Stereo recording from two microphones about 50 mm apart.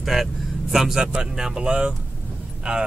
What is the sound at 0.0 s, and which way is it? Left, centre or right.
Speech, centre.